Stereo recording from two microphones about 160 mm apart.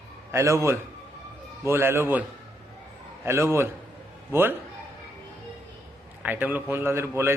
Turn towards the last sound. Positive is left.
turn(degrees=-15)  # may be behind; listen again after turning